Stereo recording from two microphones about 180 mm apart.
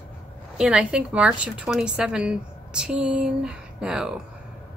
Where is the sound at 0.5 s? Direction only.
5° right (ahead or behind).